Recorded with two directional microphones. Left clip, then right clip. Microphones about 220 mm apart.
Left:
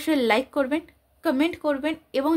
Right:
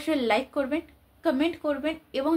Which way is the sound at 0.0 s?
50° left (ahead or behind).